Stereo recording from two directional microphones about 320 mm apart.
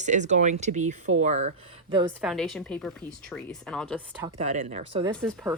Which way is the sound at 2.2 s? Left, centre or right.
Centre.